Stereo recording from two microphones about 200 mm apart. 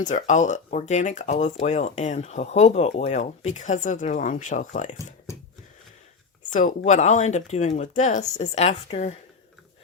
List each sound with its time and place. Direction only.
0.0 s speech: 40° left (ahead or behind)
6.5 s speech: 40° left (ahead or behind)